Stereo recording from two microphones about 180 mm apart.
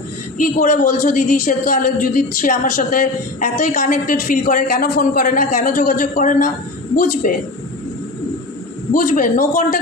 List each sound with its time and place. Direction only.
0.3 s a woman's voice: 45° left (ahead or behind)
8.9 s a woman's voice: 50° left (ahead or behind)